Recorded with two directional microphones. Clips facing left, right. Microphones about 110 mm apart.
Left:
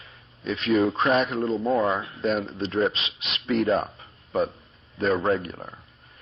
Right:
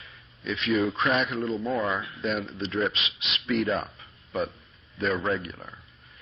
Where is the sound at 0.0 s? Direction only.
40° left (ahead or behind).